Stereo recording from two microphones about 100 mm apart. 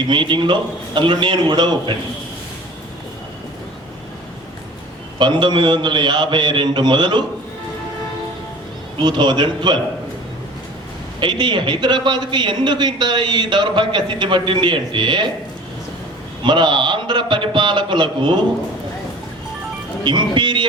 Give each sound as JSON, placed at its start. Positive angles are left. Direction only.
{"t": 0.1, "sound": "a man's voice", "side_deg": -55}
{"t": 5.2, "sound": "a man's voice", "side_deg": -50}
{"t": 9.0, "sound": "a man's voice", "side_deg": -50}
{"t": 11.2, "sound": "a man's voice", "side_deg": -50}
{"t": 16.4, "sound": "a man's voice", "side_deg": -50}
{"t": 20.1, "sound": "speech", "side_deg": -50}